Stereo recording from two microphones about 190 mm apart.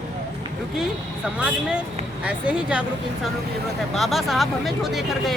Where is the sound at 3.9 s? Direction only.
Centre (ahead or behind).